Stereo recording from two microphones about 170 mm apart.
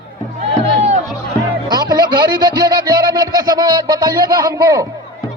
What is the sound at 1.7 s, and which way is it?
Music, 25° right (ahead or behind).